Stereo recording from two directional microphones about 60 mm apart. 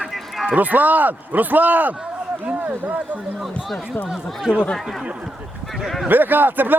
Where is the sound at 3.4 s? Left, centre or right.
Centre.